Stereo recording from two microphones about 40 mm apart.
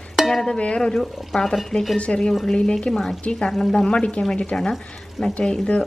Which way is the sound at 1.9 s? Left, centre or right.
Left.